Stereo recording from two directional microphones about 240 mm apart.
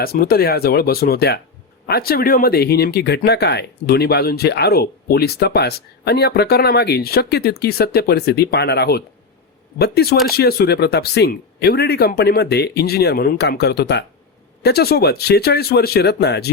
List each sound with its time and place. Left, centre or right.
0.0 s speech: left